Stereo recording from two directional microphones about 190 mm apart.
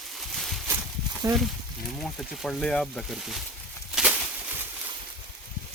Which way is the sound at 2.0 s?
5° left (ahead or behind).